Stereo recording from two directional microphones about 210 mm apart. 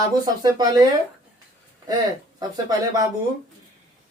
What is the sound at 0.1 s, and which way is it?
Speech, 20° right (ahead or behind).